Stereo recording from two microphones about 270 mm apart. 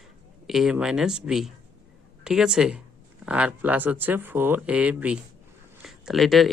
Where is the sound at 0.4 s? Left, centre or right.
Centre.